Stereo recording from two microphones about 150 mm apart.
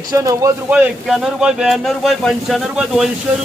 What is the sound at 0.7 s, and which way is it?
Speech, 5° right (ahead or behind).